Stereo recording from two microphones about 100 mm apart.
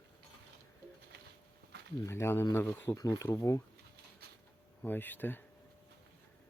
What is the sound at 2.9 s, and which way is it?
Speech, 40° left (ahead or behind).